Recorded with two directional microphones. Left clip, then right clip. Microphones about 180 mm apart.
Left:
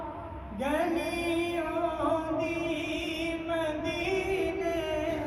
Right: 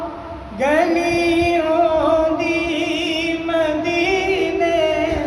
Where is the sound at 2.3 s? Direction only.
5° left (ahead or behind).